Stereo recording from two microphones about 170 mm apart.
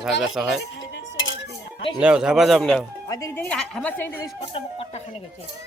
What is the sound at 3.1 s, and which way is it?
A woman's voice, 15° left (ahead or behind).